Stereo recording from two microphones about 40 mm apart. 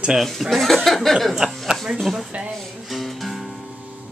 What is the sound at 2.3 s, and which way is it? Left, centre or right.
Speech, right.